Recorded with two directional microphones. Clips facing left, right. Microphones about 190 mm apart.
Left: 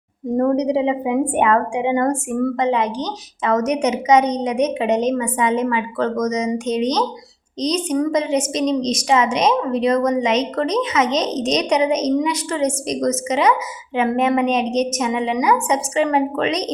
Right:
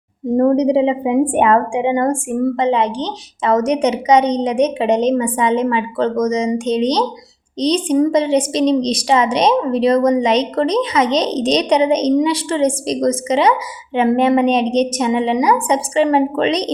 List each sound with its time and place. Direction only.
0.3 s a woman's voice: 30° right (ahead or behind)